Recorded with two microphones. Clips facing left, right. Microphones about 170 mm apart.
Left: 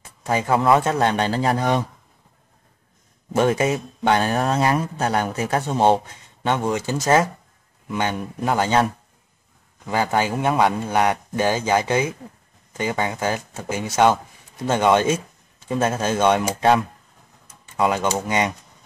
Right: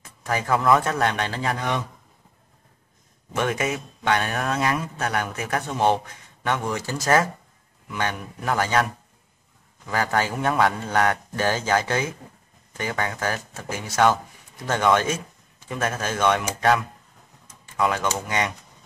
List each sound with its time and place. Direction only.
0.2 s speech: 25° left (ahead or behind)
3.3 s speech: 30° left (ahead or behind)
9.8 s a man's voice: 20° left (ahead or behind)